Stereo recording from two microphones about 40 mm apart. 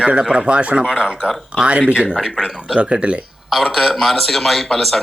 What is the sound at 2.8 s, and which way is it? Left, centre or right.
Speech, right.